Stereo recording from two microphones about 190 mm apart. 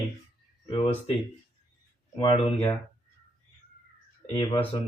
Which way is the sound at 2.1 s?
25° left (ahead or behind).